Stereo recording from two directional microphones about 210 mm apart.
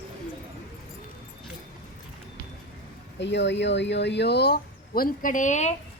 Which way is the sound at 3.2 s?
55° left (ahead or behind).